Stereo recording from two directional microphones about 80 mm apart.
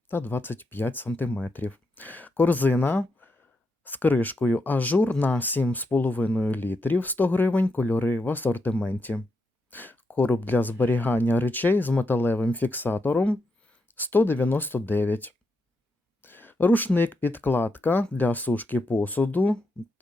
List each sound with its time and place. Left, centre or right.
0.1 s speech: left